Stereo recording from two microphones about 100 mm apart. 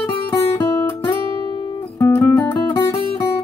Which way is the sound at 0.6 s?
25° left (ahead or behind).